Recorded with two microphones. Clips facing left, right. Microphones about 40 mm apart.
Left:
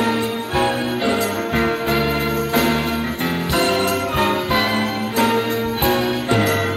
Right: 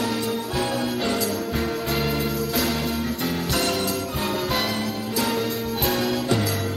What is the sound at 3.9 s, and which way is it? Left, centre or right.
Jingle bell, left.